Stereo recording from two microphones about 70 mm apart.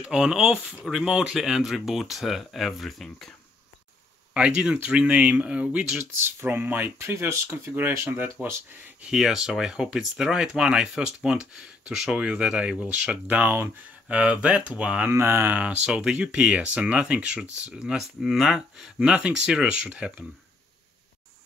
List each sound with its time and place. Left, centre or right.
0.0 s speech: centre
4.3 s speech: centre
6.1 s speech: right
7.0 s speech: right
9.1 s speech: centre
15.0 s speech: right
15.6 s speech: centre